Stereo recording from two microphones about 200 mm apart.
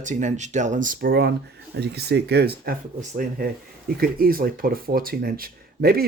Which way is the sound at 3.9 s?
50° right (ahead or behind).